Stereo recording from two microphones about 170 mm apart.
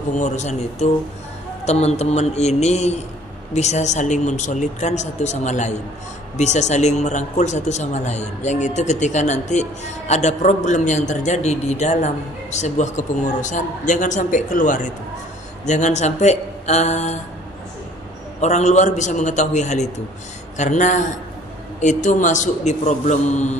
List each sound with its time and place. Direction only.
0.2 s a man's voice: 40° left (ahead or behind)
18.4 s speech: 40° left (ahead or behind)